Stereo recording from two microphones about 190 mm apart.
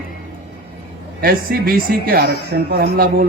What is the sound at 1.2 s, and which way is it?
Speech, 50° right (ahead or behind).